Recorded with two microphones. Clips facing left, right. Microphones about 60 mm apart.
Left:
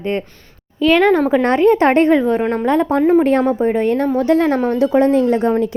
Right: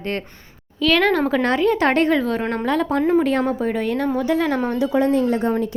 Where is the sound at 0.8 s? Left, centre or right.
Left.